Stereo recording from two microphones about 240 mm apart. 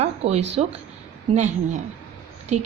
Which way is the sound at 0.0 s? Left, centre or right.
Right.